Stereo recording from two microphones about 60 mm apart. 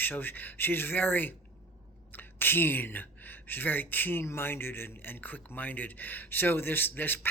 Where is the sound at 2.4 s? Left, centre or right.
Left.